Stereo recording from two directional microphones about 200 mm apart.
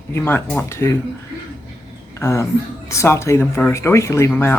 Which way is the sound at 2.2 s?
15° left (ahead or behind).